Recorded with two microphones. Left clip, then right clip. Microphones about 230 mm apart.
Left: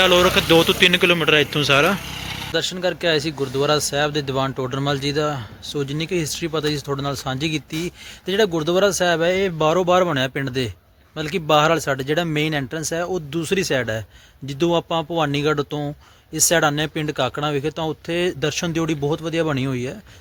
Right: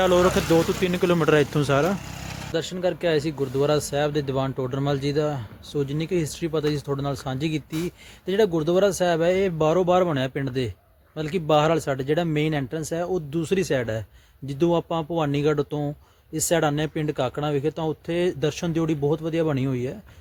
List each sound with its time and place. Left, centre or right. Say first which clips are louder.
0.0 s speech: left 4 dB; centre
1.1 s a man's voice: left 3 dB; right
2.5 s speech: left 3 dB; centre